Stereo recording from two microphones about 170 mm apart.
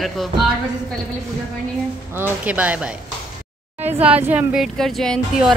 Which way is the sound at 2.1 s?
10° right (ahead or behind).